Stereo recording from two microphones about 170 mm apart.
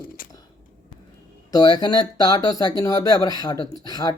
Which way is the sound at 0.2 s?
55° left (ahead or behind).